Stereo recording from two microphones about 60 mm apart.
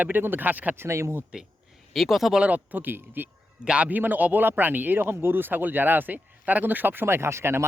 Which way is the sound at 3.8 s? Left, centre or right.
Right.